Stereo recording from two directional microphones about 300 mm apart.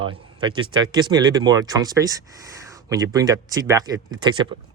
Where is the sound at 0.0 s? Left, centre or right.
Centre.